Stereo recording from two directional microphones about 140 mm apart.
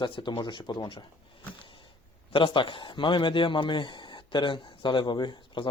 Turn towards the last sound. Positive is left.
turn(degrees=35)  # may be behind; listen again after turning